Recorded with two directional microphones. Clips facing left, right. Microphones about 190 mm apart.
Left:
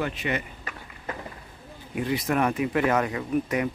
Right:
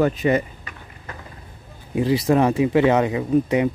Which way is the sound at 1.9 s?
30° right (ahead or behind).